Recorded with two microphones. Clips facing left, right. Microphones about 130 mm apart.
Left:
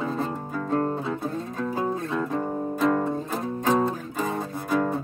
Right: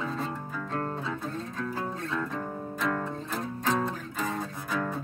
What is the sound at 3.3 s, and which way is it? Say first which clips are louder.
Music: left 3 dB; 45° left (ahead or behind).